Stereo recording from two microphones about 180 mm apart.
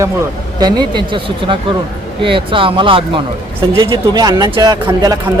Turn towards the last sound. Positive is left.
turn(degrees=-20)  # may be behind; listen again after turning